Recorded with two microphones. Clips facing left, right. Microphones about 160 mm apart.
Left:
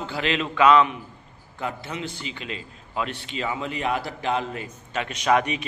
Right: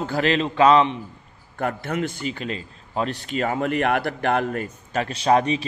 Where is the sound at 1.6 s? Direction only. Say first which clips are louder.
Right 6 dB; 55° right (ahead or behind).